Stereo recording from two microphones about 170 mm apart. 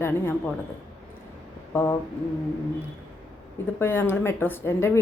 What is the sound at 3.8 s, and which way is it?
A woman's voice, 15° left (ahead or behind).